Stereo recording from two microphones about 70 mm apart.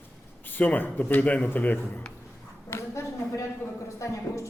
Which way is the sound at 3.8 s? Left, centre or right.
Left.